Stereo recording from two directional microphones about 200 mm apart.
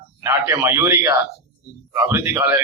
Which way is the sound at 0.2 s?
15° right (ahead or behind).